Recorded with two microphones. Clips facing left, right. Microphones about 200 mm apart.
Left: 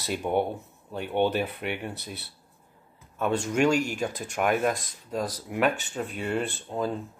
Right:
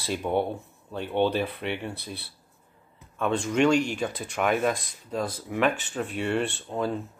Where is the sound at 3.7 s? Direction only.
45° left (ahead or behind).